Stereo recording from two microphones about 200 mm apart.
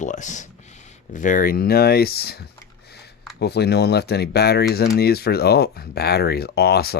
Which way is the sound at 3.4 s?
55° left (ahead or behind).